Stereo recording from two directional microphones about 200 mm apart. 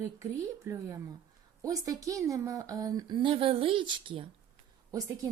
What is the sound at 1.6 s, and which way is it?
A woman's voice, 15° right (ahead or behind).